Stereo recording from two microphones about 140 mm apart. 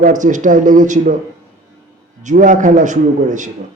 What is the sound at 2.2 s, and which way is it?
A man's voice, 70° right (ahead or behind).